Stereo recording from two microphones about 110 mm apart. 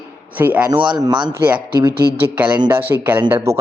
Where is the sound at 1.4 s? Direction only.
20° right (ahead or behind).